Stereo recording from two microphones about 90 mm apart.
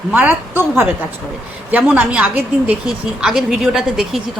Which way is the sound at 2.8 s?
5° right (ahead or behind).